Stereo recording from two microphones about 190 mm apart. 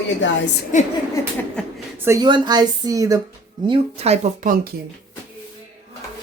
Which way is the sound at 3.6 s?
35° right (ahead or behind).